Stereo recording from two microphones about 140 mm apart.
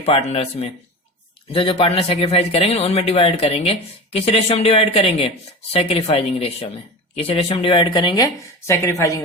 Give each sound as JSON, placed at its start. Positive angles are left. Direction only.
{"t": 0.0, "sound": "speech", "side_deg": 45}